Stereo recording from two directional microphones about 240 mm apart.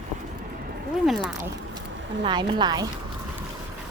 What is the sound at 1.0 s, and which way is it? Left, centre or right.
Speech, centre.